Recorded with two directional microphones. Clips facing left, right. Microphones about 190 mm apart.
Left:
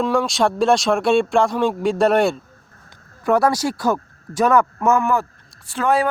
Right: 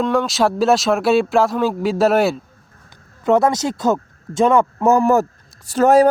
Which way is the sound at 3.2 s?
20° right (ahead or behind).